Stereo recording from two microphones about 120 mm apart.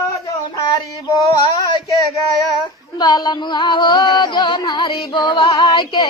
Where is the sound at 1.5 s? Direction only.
35° left (ahead or behind).